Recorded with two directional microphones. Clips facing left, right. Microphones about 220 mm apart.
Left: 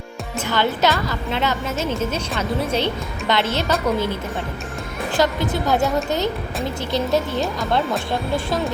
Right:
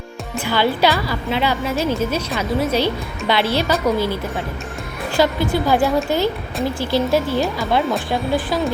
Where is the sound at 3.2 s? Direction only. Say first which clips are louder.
Right 2 dB; 10° right (ahead or behind).